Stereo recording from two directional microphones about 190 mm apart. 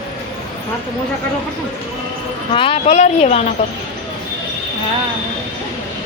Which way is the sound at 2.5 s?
30° left (ahead or behind).